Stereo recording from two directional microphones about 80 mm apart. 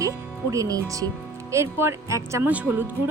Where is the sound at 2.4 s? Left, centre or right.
Centre.